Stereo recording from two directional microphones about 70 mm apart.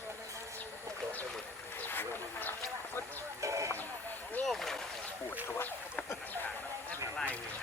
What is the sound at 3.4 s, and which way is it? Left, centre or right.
Music, right.